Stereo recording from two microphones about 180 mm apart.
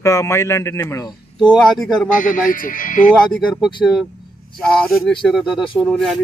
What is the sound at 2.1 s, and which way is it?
Speech, 50° left (ahead or behind).